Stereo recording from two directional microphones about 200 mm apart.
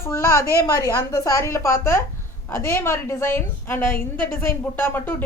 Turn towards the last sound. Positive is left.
turn(degrees=10)  # may be behind; listen again after turning